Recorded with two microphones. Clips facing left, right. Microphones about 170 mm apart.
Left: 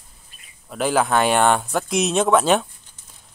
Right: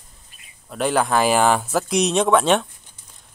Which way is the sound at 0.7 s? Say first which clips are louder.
Even; centre (ahead or behind).